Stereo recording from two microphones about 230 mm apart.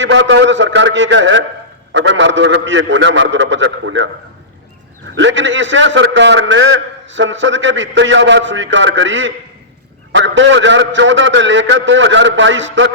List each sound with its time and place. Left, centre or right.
0.0 s a man's voice: right
5.1 s a man's voice: right